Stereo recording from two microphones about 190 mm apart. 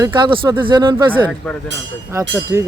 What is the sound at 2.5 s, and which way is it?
Music, 15° right (ahead or behind).